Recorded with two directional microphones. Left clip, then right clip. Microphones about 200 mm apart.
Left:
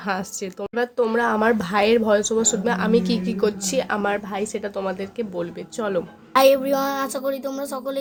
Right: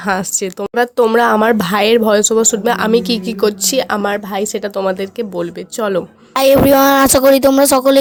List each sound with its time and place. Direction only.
0.0 s speech: 40° right (ahead or behind)
6.3 s speech: 60° right (ahead or behind)